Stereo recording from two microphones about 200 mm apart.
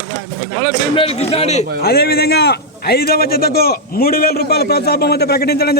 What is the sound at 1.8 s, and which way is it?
A man's voice, 50° left (ahead or behind).